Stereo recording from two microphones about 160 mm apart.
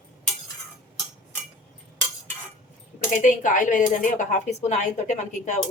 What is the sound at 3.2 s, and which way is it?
Speech, 55° left (ahead or behind).